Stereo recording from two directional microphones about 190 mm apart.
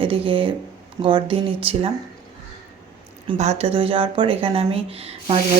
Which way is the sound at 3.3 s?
35° right (ahead or behind).